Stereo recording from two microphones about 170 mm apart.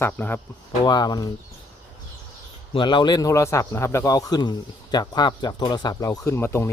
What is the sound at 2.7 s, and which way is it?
A man's voice, 25° left (ahead or behind).